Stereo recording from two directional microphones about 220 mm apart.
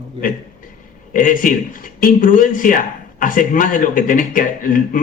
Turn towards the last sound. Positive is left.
turn(degrees=40)  # may be behind; listen again after turning